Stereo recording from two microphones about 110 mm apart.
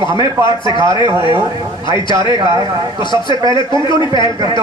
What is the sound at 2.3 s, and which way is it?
Speech, 35° right (ahead or behind).